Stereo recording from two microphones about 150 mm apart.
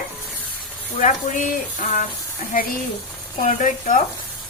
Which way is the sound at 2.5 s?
65° left (ahead or behind).